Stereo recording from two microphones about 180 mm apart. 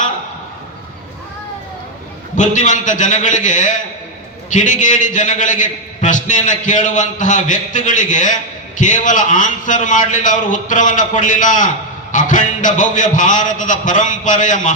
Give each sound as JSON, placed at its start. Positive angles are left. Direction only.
{"t": 2.3, "sound": "a man's voice", "side_deg": 45}